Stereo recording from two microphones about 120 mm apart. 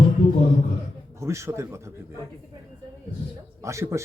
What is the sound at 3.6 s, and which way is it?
Speech, 25° right (ahead or behind).